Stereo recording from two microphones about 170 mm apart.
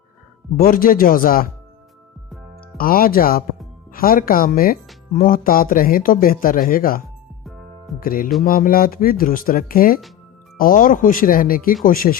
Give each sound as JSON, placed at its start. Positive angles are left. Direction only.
{"t": 0.6, "sound": "speech", "side_deg": 55}
{"t": 2.7, "sound": "speech", "side_deg": 60}